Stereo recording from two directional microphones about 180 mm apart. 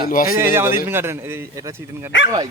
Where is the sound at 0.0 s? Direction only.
50° left (ahead or behind).